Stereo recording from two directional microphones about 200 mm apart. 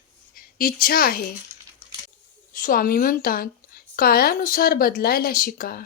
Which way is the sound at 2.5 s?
45° left (ahead or behind).